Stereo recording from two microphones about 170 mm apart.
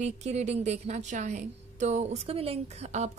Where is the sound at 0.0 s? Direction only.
40° right (ahead or behind).